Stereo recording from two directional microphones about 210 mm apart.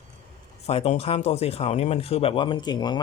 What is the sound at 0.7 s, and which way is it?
Speech, 30° left (ahead or behind).